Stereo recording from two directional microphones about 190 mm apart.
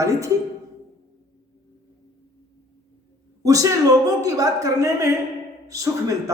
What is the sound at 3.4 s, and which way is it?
A woman's voice, 15° right (ahead or behind).